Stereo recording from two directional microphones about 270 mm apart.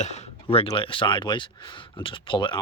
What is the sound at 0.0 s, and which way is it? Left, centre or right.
Speech, left.